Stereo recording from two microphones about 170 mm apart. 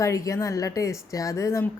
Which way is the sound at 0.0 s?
20° left (ahead or behind).